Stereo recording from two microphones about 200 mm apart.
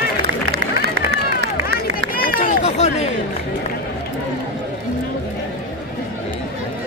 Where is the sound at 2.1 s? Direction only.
45° left (ahead or behind).